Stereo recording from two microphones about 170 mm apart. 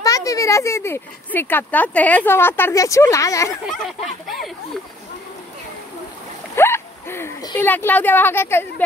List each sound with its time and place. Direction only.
0.0 s speech: 20° left (ahead or behind)
3.6 s speech: centre (ahead or behind)
6.5 s speech: 15° left (ahead or behind)